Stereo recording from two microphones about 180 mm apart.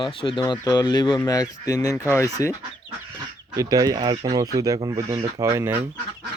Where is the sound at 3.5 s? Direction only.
20° right (ahead or behind).